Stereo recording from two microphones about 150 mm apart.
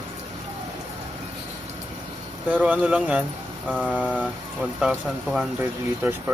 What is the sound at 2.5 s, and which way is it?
Speech, 10° right (ahead or behind).